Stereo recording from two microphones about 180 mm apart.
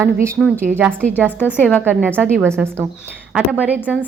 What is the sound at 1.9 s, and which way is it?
A woman's voice, 10° right (ahead or behind).